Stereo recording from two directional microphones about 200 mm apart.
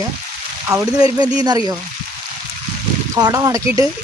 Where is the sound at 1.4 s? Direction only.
20° right (ahead or behind).